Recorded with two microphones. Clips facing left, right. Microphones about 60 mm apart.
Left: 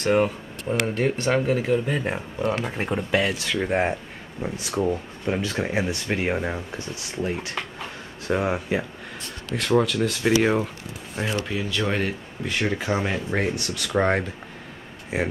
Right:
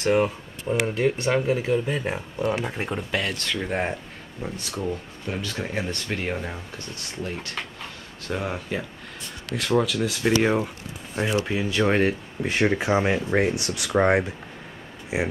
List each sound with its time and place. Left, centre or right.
0.0 s speech: centre
4.8 s speech: left
9.5 s speech: centre
11.3 s speech: centre